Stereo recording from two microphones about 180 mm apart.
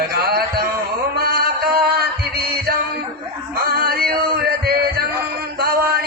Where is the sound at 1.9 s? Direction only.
60° right (ahead or behind).